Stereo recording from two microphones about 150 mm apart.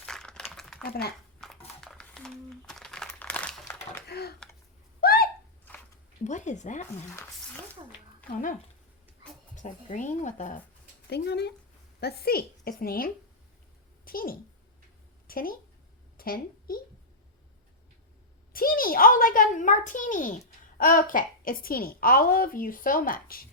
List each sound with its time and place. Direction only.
0.0 s crumpling: 5° left (ahead or behind)
1.4 s a sound: centre (ahead or behind)
4.0 s typing: 90° left
4.9 s a sound: 80° left
6.2 s speech: 55° left (ahead or behind)
7.1 s speech: 15° left (ahead or behind)
8.3 s speech: 60° left (ahead or behind)
9.6 s speech: 55° left (ahead or behind)
11.1 s a woman's voice: 90° left
14.0 s a child's voice: 75° left (ahead or behind)
16.1 s a sound: 75° left (ahead or behind)
18.5 s a sound: 75° left (ahead or behind)
20.7 s a woman's voice: 65° left (ahead or behind)